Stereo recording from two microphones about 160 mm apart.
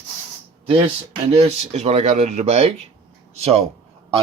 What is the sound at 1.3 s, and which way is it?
Speech, 40° right (ahead or behind).